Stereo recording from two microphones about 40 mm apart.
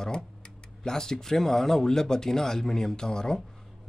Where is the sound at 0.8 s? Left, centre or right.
Centre.